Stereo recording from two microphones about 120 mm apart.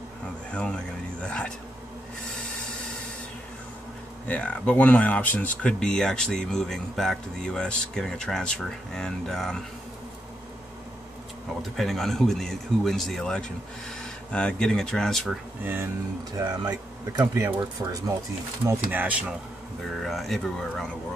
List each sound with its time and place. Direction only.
0.5 s speech: 10° left (ahead or behind)
4.3 s speech: 10° left (ahead or behind)
11.7 s speech: centre (ahead or behind)
15.6 s speech: 15° right (ahead or behind)
17.2 s speech: 25° right (ahead or behind)
18.7 s speech: 15° right (ahead or behind)
19.8 s speech: centre (ahead or behind)